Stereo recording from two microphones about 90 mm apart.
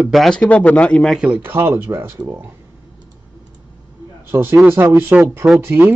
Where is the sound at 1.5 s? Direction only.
25° right (ahead or behind).